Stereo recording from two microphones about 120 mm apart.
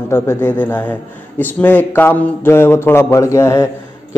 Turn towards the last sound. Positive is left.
turn(degrees=25)  # may be behind; listen again after turning